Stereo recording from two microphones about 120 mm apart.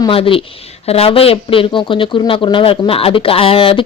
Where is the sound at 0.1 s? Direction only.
50° left (ahead or behind).